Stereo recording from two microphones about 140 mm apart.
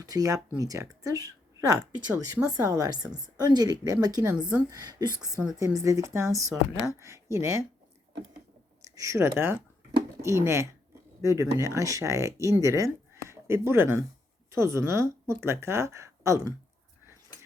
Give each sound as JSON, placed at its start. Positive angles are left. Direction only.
{"t": 0.0, "sound": "speech", "side_deg": -25}
{"t": 9.0, "sound": "speech", "side_deg": -20}